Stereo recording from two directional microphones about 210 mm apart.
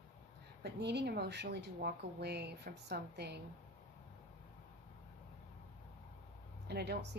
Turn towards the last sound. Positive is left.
turn(degrees=-50)  # may be behind; listen again after turning